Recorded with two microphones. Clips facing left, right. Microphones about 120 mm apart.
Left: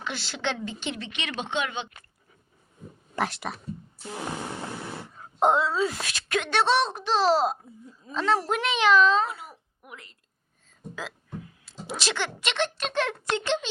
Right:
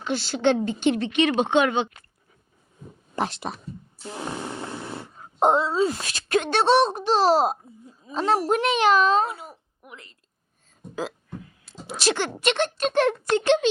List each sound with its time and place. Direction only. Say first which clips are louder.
0.0 s speech: right 9 dB; 35° right (ahead or behind); by 1.9 s 55° right (ahead or behind)
3.2 s speech: right 2 dB; 25° right (ahead or behind)
5.4 s speech: right 2 dB; 35° right (ahead or behind)
9.2 s a sound: right 3 dB; 25° right (ahead or behind)
11.9 s speech: right 6 dB; 45° right (ahead or behind)